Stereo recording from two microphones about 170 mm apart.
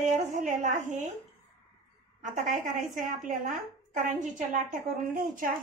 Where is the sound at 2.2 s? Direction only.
50° right (ahead or behind).